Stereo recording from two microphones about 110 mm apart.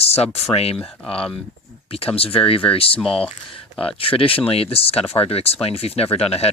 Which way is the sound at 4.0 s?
55° left (ahead or behind).